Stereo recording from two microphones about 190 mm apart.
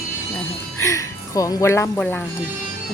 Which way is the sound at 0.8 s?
15° left (ahead or behind).